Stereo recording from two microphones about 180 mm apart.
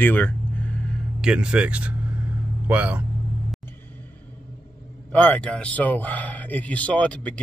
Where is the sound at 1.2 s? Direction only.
5° right (ahead or behind).